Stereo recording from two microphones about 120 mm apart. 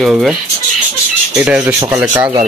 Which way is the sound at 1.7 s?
25° right (ahead or behind).